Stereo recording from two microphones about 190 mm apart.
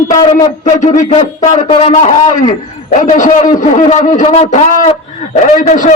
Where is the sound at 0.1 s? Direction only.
45° left (ahead or behind).